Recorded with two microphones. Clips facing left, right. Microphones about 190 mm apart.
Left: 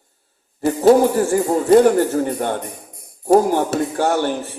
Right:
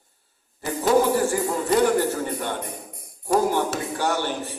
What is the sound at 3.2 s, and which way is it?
Speech, 50° left (ahead or behind).